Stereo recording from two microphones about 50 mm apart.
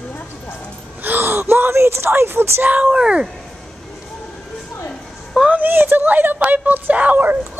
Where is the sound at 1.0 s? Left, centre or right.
Right.